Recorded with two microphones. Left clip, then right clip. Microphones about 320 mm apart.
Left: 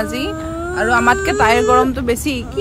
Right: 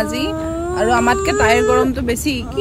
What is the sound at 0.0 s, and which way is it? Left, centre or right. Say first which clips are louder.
Speech: right 1 dB; centre.